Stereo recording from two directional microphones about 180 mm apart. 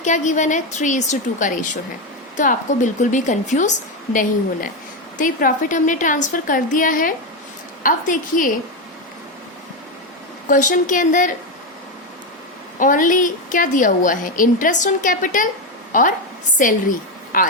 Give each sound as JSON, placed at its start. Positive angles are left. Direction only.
{"t": 0.0, "sound": "a woman's voice", "side_deg": 40}
{"t": 10.5, "sound": "a woman's voice", "side_deg": 45}
{"t": 12.8, "sound": "a woman's voice", "side_deg": 45}